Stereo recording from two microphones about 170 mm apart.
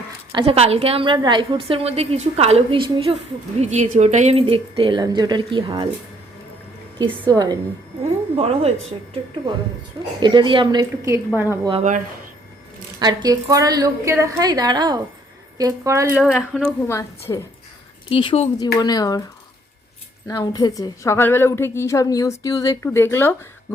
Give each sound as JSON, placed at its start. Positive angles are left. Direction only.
{"t": 0.3, "sound": "a woman's voice", "side_deg": -35}
{"t": 3.6, "sound": "a woman's voice", "side_deg": -45}
{"t": 7.0, "sound": "a woman's voice", "side_deg": -25}
{"t": 8.4, "sound": "a woman's voice", "side_deg": -35}
{"t": 10.2, "sound": "a woman's voice", "side_deg": -25}
{"t": 11.7, "sound": "speech", "side_deg": -45}
{"t": 13.0, "sound": "a woman's voice", "side_deg": -25}
{"t": 16.3, "sound": "a woman's voice", "side_deg": 5}
{"t": 16.9, "sound": "a woman's voice", "side_deg": 15}
{"t": 18.1, "sound": "speech", "side_deg": 30}
{"t": 20.2, "sound": "a woman's voice", "side_deg": 20}